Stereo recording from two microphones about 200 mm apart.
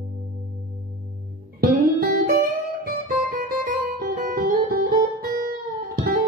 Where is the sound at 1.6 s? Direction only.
50° right (ahead or behind).